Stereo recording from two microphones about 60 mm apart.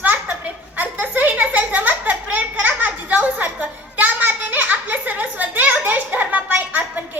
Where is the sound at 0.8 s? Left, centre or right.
Right.